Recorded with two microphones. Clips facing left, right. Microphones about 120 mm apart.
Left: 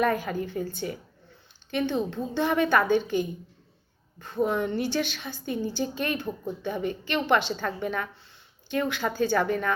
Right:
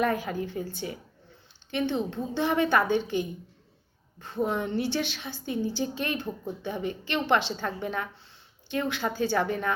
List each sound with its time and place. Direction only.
0.0 s a woman's voice: 20° right (ahead or behind)
1.7 s a woman's voice: 20° right (ahead or behind)